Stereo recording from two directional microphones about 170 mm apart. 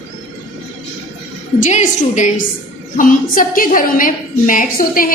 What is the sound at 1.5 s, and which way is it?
A woman's voice, 45° left (ahead or behind).